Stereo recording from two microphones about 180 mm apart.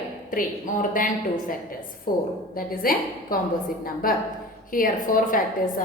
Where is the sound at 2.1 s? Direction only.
50° left (ahead or behind).